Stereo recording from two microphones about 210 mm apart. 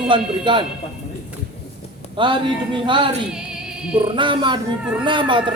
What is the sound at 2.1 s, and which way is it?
A man's voice, 25° right (ahead or behind).